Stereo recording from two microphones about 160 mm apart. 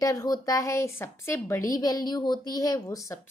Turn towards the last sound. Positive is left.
turn(degrees=20)  # may be behind; listen again after turning